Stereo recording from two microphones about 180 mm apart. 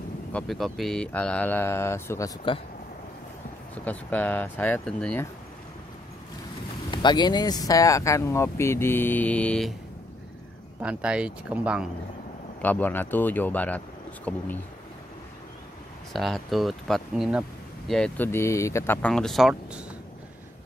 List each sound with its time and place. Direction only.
0.3 s speech: 5° left (ahead or behind)
3.7 s speech: 10° left (ahead or behind)
6.9 s speech: 25° left (ahead or behind); by 9.8 s 5° left (ahead or behind)
10.8 s speech: 5° right (ahead or behind)
12.6 s speech: 10° left (ahead or behind)
16.1 s speech: centre (ahead or behind)